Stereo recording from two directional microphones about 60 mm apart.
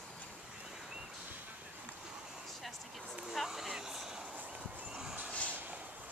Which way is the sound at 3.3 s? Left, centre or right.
Centre.